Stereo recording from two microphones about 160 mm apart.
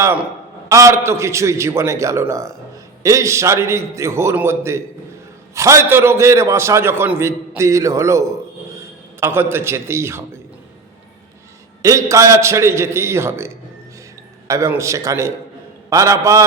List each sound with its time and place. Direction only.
0.0 s a man's voice: 15° right (ahead or behind)
11.8 s a man's voice: 20° right (ahead or behind)